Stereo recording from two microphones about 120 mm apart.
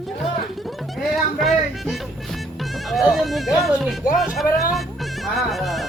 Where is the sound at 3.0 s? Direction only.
Centre (ahead or behind).